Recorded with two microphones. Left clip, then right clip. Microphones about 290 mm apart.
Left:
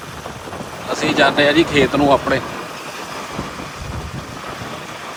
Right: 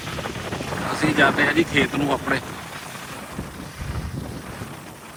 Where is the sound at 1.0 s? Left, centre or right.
Centre.